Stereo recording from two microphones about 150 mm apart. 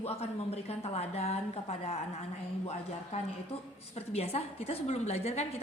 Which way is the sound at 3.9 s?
45° left (ahead or behind).